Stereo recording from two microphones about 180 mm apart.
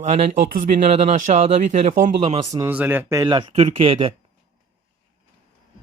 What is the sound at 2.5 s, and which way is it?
Speech, 10° right (ahead or behind).